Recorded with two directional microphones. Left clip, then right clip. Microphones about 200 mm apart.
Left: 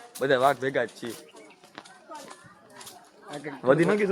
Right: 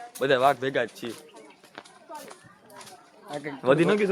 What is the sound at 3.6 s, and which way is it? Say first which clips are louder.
Speech: even; centre (ahead or behind).